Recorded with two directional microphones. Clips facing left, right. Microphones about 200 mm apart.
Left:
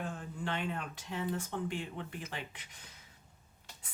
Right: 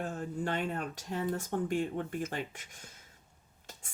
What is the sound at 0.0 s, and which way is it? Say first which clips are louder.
Speech: right 4 dB; 40° right (ahead or behind).